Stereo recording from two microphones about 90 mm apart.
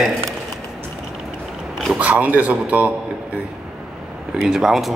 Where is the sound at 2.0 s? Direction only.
15° right (ahead or behind).